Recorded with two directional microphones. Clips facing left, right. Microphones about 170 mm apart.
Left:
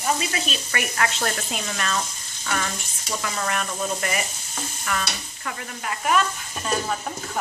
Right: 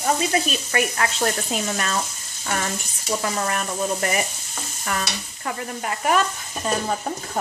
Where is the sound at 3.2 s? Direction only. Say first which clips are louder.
Right 1 dB; 35° right (ahead or behind).